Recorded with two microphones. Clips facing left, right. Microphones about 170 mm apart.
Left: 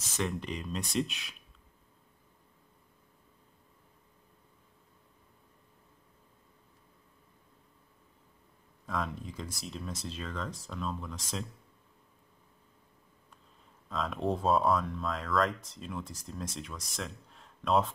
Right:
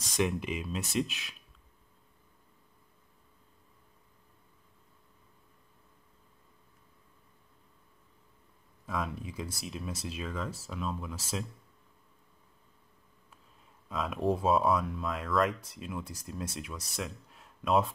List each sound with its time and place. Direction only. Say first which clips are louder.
0.1 s speech: right 4 dB; 10° right (ahead or behind)
8.8 s speech: even; 5° right (ahead or behind)
13.8 s speech: right 2 dB; 5° right (ahead or behind)